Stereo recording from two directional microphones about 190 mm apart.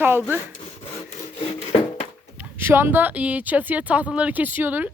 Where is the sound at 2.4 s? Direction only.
10° right (ahead or behind).